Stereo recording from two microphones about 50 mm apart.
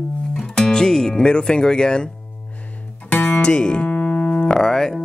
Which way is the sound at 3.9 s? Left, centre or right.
Left.